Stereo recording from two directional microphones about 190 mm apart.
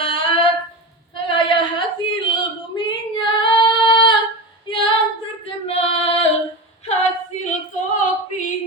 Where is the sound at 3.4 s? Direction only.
25° left (ahead or behind).